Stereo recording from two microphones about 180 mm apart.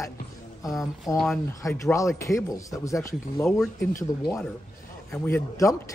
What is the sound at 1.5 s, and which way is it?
Speech, 15° left (ahead or behind).